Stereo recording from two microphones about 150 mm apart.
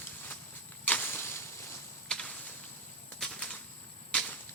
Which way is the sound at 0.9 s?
15° left (ahead or behind).